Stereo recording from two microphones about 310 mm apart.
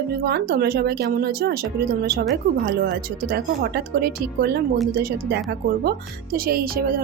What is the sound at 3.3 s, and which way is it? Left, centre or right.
A woman's voice, right.